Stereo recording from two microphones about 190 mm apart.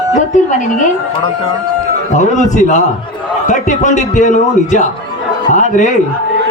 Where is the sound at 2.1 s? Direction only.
40° left (ahead or behind).